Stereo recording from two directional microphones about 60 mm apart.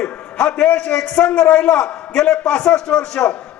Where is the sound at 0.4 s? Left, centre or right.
Centre.